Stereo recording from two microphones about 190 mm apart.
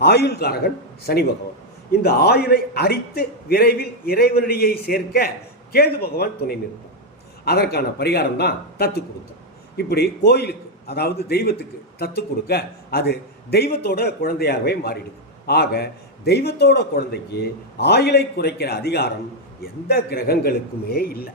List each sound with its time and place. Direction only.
0.0 s a man's voice: 60° left (ahead or behind)